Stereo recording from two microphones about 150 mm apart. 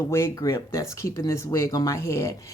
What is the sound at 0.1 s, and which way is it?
Speech, 20° left (ahead or behind).